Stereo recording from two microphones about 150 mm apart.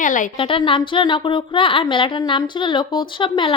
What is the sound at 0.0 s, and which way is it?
Speech, 60° left (ahead or behind).